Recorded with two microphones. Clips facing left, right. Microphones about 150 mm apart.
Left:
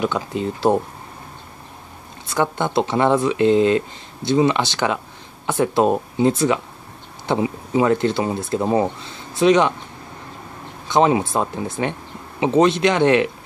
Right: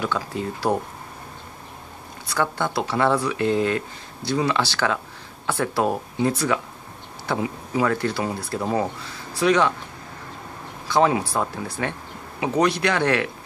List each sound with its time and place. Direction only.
0.0 s speech: 20° left (ahead or behind)
2.2 s speech: 20° left (ahead or behind)
10.9 s speech: 20° left (ahead or behind)